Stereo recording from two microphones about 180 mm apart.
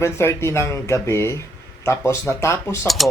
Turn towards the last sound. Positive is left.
turn(degrees=0)  # may be behind; listen again after turning